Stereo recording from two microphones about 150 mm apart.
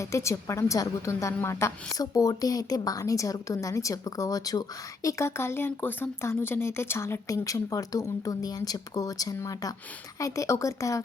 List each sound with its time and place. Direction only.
0.0 s speech: 20° left (ahead or behind)